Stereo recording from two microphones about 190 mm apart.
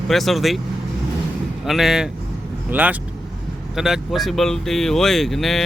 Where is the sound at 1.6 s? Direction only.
Centre (ahead or behind).